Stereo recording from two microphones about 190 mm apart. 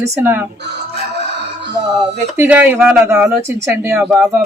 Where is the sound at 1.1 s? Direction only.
65° right (ahead or behind).